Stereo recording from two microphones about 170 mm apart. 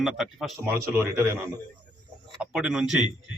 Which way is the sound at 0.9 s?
15° right (ahead or behind).